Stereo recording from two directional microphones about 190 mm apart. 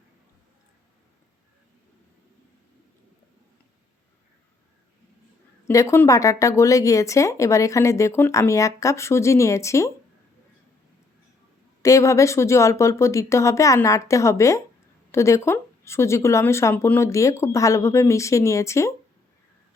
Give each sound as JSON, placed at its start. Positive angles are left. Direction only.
{"t": 5.6, "sound": "speech", "side_deg": 15}
{"t": 11.8, "sound": "speech", "side_deg": 15}